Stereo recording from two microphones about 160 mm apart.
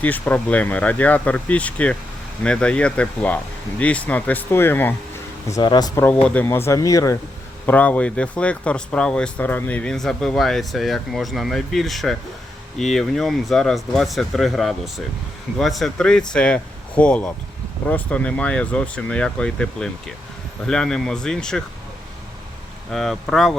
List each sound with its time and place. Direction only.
0.0 s speech: 10° left (ahead or behind)
5.5 s speech: 25° left (ahead or behind)
6.2 s speech: 10° left (ahead or behind)
7.7 s speech: 10° left (ahead or behind)
22.9 s speech: centre (ahead or behind)